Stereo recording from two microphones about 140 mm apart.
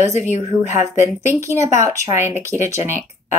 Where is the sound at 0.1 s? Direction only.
55° left (ahead or behind).